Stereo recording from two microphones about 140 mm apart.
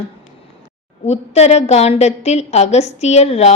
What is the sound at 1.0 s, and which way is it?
A woman's voice, 50° left (ahead or behind).